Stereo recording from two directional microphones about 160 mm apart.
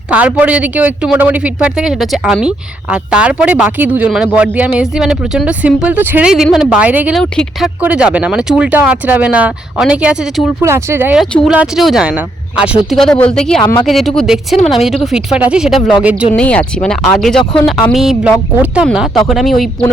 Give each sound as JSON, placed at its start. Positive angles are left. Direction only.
{"t": 0.1, "sound": "speech", "side_deg": -10}
{"t": 7.2, "sound": "speech", "side_deg": 5}
{"t": 7.8, "sound": "speech", "side_deg": -10}
{"t": 10.6, "sound": "speech", "side_deg": -15}
{"t": 11.2, "sound": "speech", "side_deg": 0}
{"t": 16.3, "sound": "speech", "side_deg": 5}